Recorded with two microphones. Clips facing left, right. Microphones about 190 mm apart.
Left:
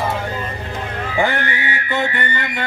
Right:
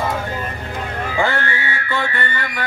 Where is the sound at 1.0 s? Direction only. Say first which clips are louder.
Left 1 dB; 20° left (ahead or behind).